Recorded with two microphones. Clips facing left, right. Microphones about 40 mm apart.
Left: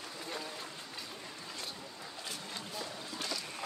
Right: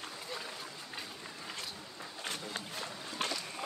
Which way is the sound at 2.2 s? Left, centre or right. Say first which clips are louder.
Right 4 dB; right.